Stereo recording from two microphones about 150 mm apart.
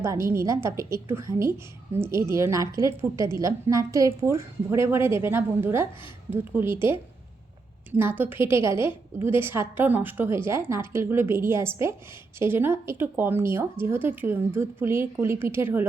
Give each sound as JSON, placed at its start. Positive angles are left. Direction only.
{"t": 0.0, "sound": "a woman's voice", "side_deg": -20}
{"t": 7.9, "sound": "a woman's voice", "side_deg": -15}